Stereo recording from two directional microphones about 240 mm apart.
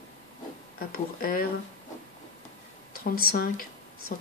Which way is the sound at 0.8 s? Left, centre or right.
Left.